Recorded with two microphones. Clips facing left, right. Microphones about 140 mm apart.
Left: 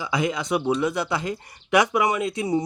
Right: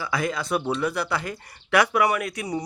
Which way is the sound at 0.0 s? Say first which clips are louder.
Left 2 dB; 20° left (ahead or behind).